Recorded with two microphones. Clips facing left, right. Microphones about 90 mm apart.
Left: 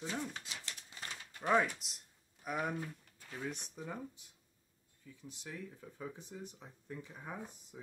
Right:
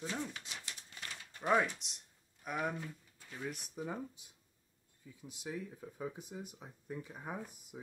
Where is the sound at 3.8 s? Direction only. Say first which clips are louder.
Right 3 dB; 15° right (ahead or behind).